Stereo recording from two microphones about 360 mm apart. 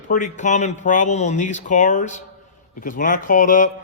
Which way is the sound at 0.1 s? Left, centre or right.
Centre.